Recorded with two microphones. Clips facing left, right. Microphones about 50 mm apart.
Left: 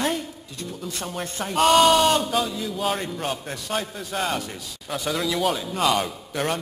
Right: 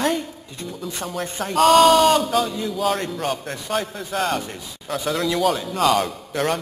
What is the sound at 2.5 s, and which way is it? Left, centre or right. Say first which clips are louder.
Speech: right 3 dB; centre.